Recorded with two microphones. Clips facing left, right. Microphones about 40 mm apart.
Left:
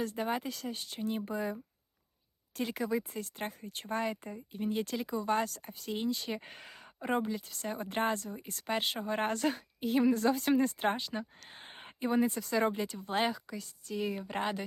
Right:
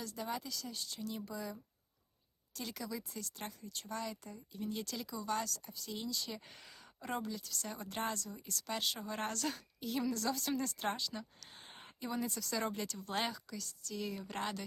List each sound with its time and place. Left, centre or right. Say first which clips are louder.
0.0 s speech: left 8 dB; left
2.6 s speech: left 10 dB; left